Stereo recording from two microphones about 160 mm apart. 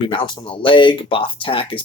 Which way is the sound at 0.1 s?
30° left (ahead or behind).